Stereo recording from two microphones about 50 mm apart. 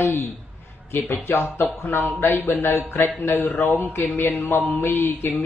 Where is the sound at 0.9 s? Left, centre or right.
Left.